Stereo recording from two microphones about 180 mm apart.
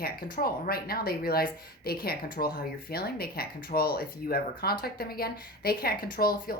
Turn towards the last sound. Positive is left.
turn(degrees=55)  # may be behind; listen again after turning